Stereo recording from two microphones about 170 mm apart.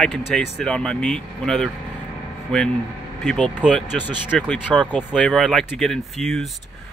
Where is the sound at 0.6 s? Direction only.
5° left (ahead or behind).